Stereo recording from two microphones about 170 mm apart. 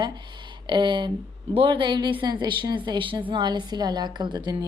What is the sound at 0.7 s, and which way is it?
Speech, 30° right (ahead or behind).